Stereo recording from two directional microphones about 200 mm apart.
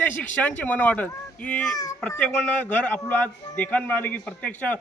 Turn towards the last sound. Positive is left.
turn(degrees=10)  # may be behind; listen again after turning